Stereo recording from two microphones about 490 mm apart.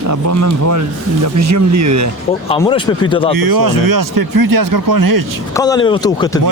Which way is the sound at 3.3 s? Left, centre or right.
Right.